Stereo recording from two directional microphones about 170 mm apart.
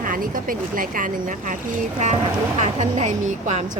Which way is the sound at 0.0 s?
55° right (ahead or behind).